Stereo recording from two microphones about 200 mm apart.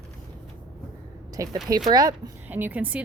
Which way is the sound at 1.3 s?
15° right (ahead or behind).